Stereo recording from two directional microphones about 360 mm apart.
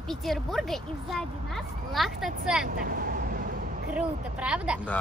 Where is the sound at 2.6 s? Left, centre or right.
Right.